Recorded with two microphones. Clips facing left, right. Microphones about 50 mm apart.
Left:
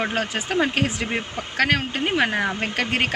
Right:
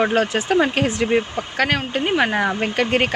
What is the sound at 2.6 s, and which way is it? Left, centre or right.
Speech, centre.